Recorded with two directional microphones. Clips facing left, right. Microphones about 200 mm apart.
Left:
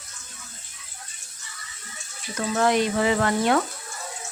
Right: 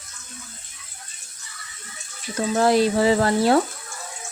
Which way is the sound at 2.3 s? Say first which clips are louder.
Right 3 dB; 30° right (ahead or behind).